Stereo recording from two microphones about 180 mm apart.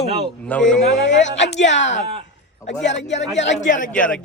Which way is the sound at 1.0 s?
90° left.